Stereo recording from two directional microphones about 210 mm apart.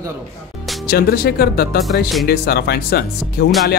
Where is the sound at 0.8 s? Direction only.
45° left (ahead or behind).